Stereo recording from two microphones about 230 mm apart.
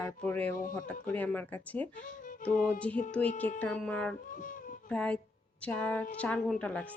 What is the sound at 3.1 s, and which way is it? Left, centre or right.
Speech, centre.